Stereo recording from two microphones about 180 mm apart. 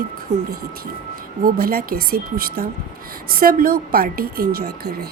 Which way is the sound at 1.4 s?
55° right (ahead or behind).